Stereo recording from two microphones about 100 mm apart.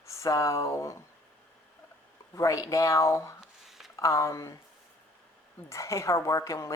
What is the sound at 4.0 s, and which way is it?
Speech, 30° left (ahead or behind).